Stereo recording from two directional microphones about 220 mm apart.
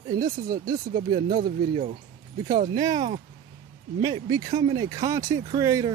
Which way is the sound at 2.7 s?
20° right (ahead or behind).